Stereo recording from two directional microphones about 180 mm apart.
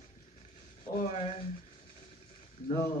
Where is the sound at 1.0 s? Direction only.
35° left (ahead or behind).